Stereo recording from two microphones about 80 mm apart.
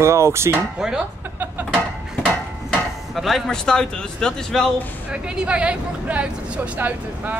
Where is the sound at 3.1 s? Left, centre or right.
Centre.